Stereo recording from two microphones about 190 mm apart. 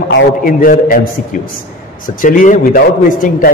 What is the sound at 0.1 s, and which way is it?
Speech, 50° left (ahead or behind).